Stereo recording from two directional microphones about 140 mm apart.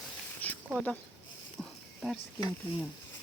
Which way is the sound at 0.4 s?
10° left (ahead or behind).